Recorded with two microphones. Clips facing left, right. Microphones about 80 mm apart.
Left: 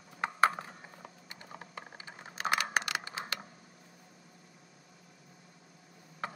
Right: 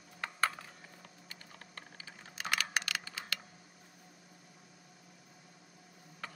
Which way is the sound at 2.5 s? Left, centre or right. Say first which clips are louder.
Left 4 dB; left.